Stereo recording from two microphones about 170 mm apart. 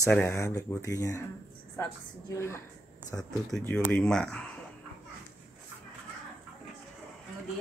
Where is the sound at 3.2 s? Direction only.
5° left (ahead or behind).